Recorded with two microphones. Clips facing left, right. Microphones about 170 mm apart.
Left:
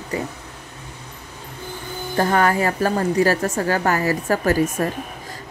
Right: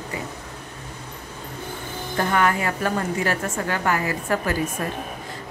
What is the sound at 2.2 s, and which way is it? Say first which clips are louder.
A woman's voice: left 4 dB; 35° left (ahead or behind).